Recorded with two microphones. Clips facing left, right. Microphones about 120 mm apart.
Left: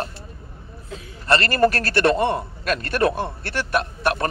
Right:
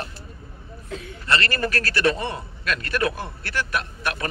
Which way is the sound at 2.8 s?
40° left (ahead or behind).